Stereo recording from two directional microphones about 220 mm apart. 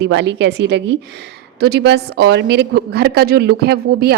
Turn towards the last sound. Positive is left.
turn(degrees=-45)  # may be behind; listen again after turning